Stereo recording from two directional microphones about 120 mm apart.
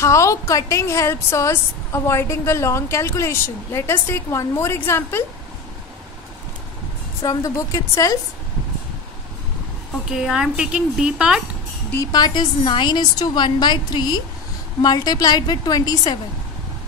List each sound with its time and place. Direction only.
0.0 s a woman's voice: 25° left (ahead or behind)
7.2 s a woman's voice: 25° left (ahead or behind)
10.1 s a woman's voice: 5° right (ahead or behind)
12.0 s a woman's voice: 35° left (ahead or behind)